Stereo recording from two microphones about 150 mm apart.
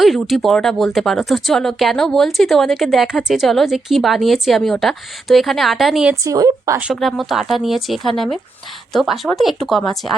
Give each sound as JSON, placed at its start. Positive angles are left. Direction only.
{"t": 0.0, "sound": "a woman's voice", "side_deg": 0}
{"t": 6.2, "sound": "speech", "side_deg": -25}
{"t": 6.7, "sound": "a woman's voice", "side_deg": -5}